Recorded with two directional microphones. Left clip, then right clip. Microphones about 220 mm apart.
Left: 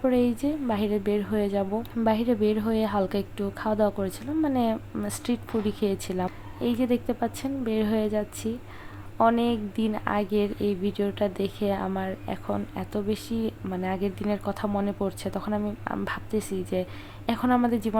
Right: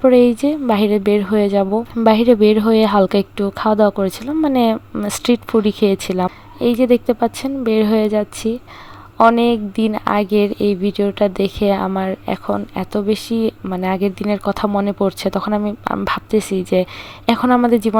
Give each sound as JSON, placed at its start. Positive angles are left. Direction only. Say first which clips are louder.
{"t": 0.0, "sound": "speech", "louder": "right 13 dB", "side_deg": -30}